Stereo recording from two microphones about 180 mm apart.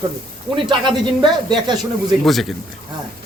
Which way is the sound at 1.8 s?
Centre (ahead or behind).